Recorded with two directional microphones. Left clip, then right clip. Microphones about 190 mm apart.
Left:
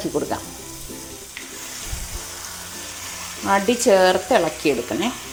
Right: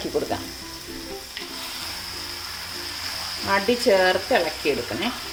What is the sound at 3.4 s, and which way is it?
Speech, 30° left (ahead or behind).